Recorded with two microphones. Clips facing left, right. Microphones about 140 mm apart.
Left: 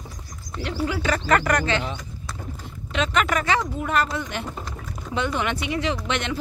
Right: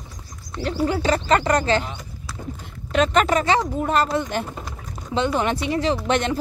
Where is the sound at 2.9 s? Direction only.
40° right (ahead or behind).